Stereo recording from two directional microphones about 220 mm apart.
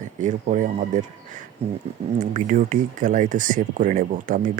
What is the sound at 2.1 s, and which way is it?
Speech, 35° right (ahead or behind).